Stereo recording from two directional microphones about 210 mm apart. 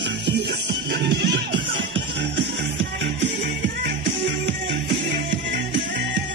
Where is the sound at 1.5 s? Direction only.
25° right (ahead or behind).